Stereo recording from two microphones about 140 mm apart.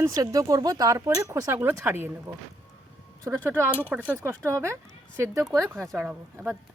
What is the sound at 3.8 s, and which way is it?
Speech, 15° left (ahead or behind).